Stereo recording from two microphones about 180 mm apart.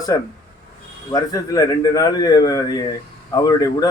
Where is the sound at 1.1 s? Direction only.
20° left (ahead or behind).